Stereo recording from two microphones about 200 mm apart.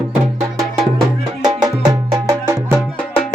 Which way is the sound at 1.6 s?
20° right (ahead or behind).